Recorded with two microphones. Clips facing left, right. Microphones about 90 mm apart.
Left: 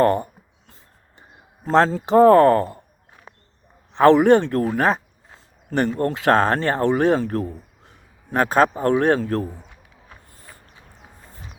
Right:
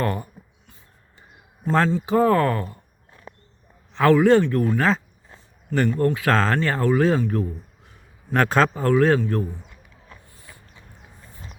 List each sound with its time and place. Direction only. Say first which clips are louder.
0.0 s a sound: left 8 dB; 40° left (ahead or behind)
1.6 s speech: left 3 dB; 35° left (ahead or behind)
3.9 s a man's voice: left 3 dB; 25° left (ahead or behind)
6.3 s speech: left 3 dB; 20° left (ahead or behind); by 7.5 s 40° left (ahead or behind)
8.5 s speech: left 2 dB; 20° left (ahead or behind); by 9.5 s 40° left (ahead or behind)
10.3 s a sound: left 1 dB; 40° left (ahead or behind)